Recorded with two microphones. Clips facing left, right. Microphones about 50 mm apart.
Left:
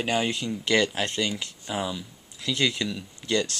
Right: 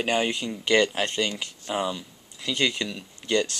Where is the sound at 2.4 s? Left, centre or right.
Centre.